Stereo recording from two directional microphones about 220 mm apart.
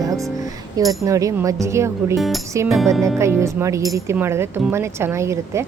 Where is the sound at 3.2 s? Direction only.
15° right (ahead or behind).